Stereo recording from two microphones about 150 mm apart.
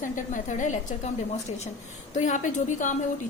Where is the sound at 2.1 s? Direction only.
55° left (ahead or behind).